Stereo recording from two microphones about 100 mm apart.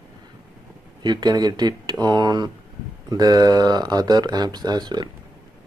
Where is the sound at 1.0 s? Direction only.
45° right (ahead or behind).